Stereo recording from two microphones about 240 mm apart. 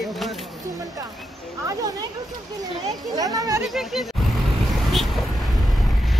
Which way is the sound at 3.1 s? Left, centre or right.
Centre.